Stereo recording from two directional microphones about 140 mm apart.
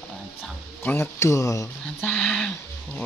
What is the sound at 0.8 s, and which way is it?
Speech, 15° left (ahead or behind).